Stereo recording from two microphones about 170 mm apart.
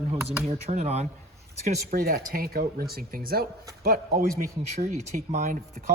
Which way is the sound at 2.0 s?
55° right (ahead or behind).